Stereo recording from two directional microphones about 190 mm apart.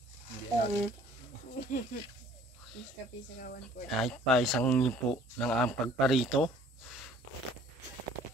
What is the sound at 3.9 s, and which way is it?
Speech, centre (ahead or behind).